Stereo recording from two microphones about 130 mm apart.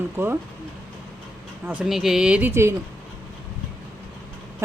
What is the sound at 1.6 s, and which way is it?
Speech, 10° right (ahead or behind).